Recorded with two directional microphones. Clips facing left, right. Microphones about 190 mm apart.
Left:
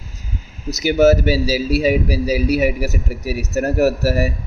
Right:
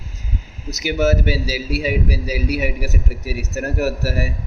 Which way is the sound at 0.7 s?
35° left (ahead or behind).